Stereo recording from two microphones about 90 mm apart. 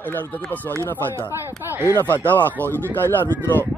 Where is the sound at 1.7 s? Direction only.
25° right (ahead or behind).